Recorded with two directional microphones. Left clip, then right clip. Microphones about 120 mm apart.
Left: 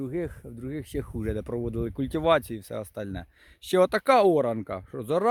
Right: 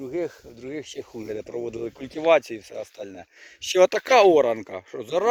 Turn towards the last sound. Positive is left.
turn(degrees=25)  # may be behind; listen again after turning